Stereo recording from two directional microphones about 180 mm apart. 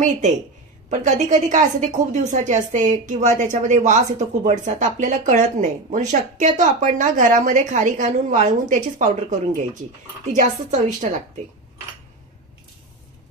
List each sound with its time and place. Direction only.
0.8 s a woman's voice: 40° right (ahead or behind)